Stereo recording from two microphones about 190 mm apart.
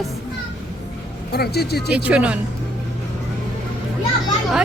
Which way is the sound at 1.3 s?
55° left (ahead or behind).